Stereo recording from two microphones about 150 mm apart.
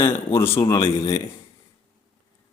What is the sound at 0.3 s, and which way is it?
Speech, 15° left (ahead or behind).